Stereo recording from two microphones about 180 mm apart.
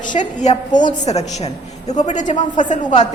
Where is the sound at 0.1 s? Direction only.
45° left (ahead or behind).